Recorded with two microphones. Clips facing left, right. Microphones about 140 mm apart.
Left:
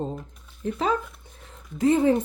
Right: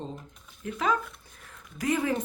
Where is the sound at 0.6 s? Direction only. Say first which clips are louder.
Left 3 dB; 30° left (ahead or behind).